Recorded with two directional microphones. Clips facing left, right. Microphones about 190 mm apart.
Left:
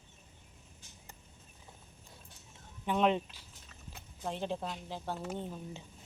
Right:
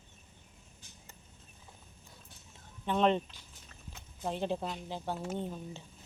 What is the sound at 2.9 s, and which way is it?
Speech, 5° left (ahead or behind).